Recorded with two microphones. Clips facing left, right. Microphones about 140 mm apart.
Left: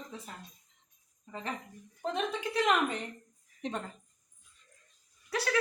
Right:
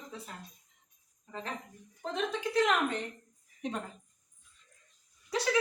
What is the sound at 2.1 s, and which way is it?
A woman's voice, 5° left (ahead or behind).